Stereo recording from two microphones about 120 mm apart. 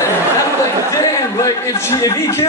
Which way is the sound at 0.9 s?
25° left (ahead or behind).